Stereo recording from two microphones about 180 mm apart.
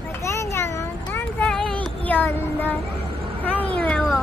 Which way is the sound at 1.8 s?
10° left (ahead or behind).